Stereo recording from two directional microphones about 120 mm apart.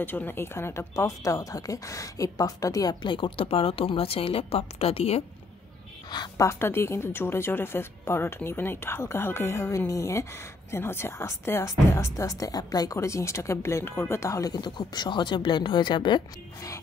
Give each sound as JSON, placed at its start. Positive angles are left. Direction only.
{"t": 0.0, "sound": "speech", "side_deg": 15}
{"t": 6.3, "sound": "speech", "side_deg": 20}